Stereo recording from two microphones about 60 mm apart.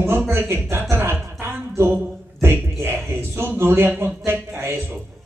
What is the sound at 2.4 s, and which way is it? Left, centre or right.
A man's voice, right.